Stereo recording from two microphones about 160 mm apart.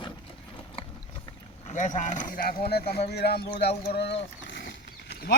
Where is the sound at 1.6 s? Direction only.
50° left (ahead or behind).